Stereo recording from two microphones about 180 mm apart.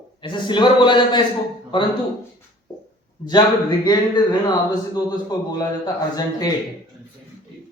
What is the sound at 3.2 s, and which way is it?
Speech, 25° left (ahead or behind).